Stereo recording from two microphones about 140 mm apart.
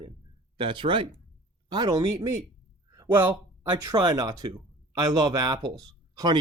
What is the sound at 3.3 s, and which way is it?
Speech, 30° right (ahead or behind).